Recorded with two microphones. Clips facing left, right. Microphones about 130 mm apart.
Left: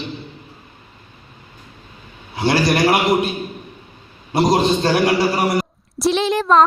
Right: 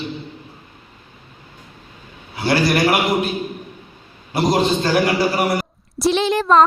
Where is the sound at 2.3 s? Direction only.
25° left (ahead or behind).